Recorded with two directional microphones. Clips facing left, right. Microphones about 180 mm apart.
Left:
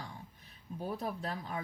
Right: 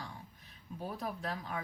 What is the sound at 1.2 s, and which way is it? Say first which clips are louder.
Speech: left 1 dB; 35° left (ahead or behind).